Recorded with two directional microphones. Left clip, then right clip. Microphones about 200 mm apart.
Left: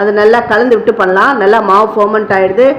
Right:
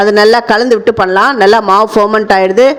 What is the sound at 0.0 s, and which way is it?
A man's voice, 55° right (ahead or behind).